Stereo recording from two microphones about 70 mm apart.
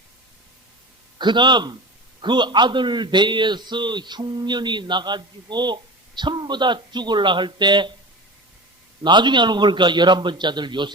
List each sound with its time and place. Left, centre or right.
1.2 s a man's voice: right
9.0 s a man's voice: right